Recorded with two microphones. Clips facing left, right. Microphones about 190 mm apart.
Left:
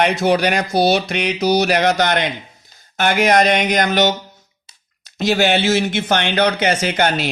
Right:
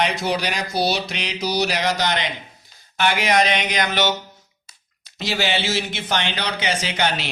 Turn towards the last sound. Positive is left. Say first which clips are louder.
# left 6 dB
turn(degrees=50)  # may be behind; listen again after turning